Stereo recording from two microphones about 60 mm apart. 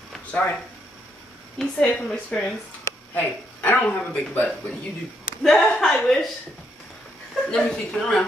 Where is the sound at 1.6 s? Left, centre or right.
Centre.